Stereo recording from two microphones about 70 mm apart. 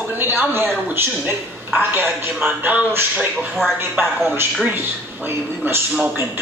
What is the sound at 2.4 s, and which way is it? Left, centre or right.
Speech, right.